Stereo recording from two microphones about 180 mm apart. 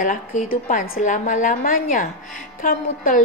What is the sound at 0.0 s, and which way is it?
A woman's voice, 45° left (ahead or behind).